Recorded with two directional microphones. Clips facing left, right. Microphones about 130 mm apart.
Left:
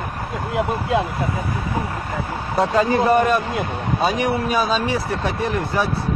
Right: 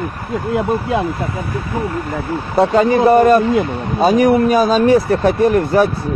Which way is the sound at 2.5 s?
30° right (ahead or behind).